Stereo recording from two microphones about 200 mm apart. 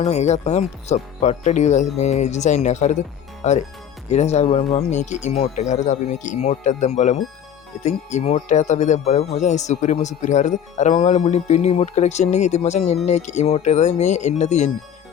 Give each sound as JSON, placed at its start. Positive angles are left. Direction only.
{"t": 0.0, "sound": "speech", "side_deg": 35}